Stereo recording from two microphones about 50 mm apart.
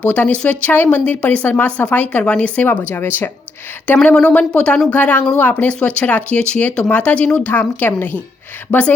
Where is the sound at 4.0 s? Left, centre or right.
Left.